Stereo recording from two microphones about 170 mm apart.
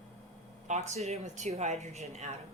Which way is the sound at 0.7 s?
45° right (ahead or behind).